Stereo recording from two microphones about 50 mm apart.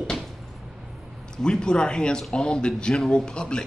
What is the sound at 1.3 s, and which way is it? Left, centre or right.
A man's voice, centre.